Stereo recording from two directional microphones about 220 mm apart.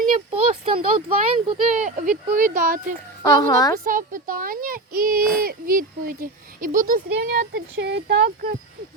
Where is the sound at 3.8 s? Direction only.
40° right (ahead or behind).